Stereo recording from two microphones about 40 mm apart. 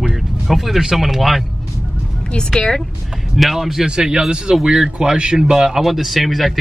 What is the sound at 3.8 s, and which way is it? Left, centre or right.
Speech, centre.